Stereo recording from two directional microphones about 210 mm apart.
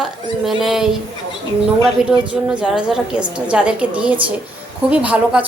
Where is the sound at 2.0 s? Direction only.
5° right (ahead or behind).